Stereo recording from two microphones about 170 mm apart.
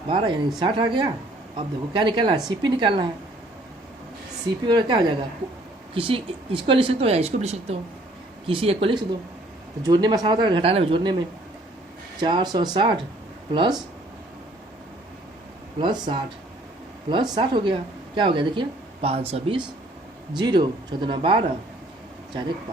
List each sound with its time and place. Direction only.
0.1 s speech: 30° right (ahead or behind)
4.6 s speech: 25° right (ahead or behind)
12.2 s speech: 25° right (ahead or behind)
15.8 s speech: 25° right (ahead or behind)